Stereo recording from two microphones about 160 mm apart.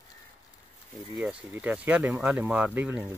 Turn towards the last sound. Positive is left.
turn(degrees=-10)  # may be behind; listen again after turning